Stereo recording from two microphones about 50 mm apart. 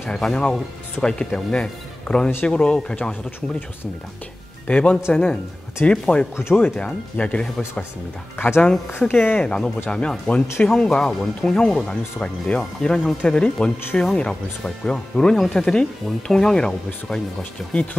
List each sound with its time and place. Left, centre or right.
0.0 s speech: centre
4.6 s speech: left
8.4 s speech: left
9.0 s speech: left
9.4 s speech: centre